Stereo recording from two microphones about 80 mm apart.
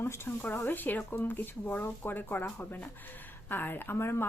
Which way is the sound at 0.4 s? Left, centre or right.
Left.